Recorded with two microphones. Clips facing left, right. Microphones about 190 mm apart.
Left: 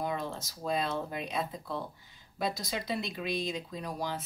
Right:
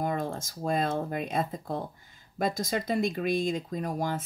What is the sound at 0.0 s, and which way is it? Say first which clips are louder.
Speech: right 4 dB; 50° right (ahead or behind).